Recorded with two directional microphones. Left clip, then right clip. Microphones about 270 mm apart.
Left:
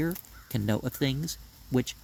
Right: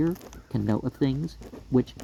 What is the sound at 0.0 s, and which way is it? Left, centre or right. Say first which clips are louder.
Speech: right 5 dB; left.